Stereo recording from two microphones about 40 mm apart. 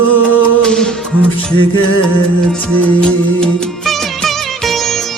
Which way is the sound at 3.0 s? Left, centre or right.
Centre.